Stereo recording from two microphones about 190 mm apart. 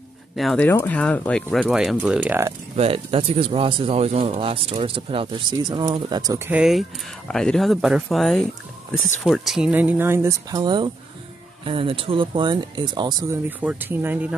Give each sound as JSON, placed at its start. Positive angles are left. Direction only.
{"t": 0.4, "sound": "speech", "side_deg": 5}
{"t": 2.7, "sound": "speech", "side_deg": -30}
{"t": 13.5, "sound": "speech", "side_deg": -10}